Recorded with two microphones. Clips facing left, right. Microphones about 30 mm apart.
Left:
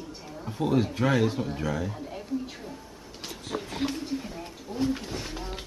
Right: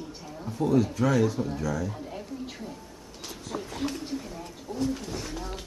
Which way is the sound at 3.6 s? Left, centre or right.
Left.